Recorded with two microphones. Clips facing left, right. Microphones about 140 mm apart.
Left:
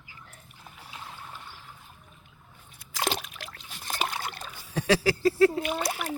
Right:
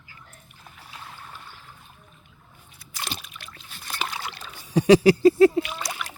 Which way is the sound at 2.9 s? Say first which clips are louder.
Left 6 dB; 90° left.